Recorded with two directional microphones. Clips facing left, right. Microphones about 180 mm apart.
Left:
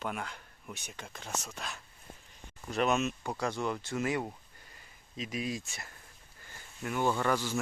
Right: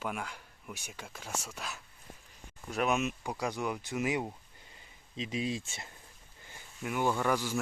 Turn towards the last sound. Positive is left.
turn(degrees=-10)  # may be behind; listen again after turning